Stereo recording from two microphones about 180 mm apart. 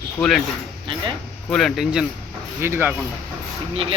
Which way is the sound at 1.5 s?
Centre (ahead or behind).